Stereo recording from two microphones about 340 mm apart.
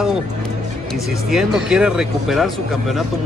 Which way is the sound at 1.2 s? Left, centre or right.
Centre.